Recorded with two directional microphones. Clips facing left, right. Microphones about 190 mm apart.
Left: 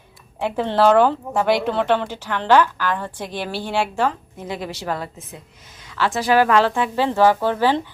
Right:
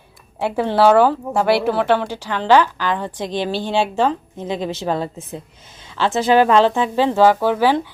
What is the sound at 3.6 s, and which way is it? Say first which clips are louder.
A woman's voice: right 2 dB; 20° right (ahead or behind).